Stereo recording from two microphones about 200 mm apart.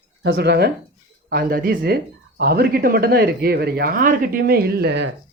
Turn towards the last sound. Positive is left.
turn(degrees=-55)  # may be behind; listen again after turning